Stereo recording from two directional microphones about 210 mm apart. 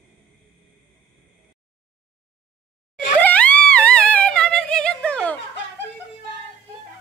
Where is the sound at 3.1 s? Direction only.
5° left (ahead or behind).